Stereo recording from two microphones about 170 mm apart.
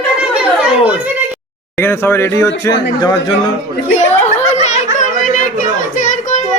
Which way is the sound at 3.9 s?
40° left (ahead or behind).